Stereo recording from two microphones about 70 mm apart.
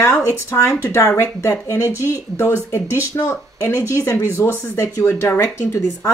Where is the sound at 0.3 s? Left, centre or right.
Left.